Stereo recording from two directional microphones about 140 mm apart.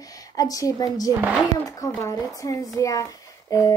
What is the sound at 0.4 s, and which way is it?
Speech, 25° left (ahead or behind).